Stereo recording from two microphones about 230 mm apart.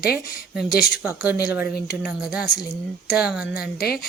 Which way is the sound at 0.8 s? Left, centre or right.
Centre.